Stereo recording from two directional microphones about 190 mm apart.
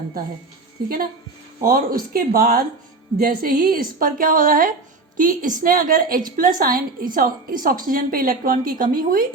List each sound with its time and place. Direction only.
1.6 s a woman's voice: 50° right (ahead or behind)